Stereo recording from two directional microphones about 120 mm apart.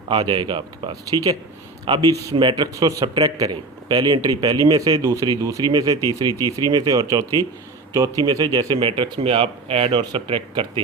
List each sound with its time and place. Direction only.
0.1 s speech: 40° right (ahead or behind)